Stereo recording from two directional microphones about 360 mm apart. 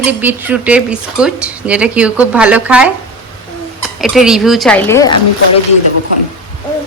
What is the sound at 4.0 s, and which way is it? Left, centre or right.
Speech, centre.